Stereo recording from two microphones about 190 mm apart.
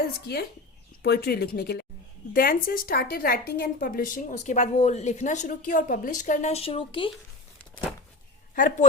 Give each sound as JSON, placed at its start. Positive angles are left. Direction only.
{"t": 1.0, "sound": "a woman's voice", "side_deg": 55}
{"t": 8.5, "sound": "a woman's voice", "side_deg": 45}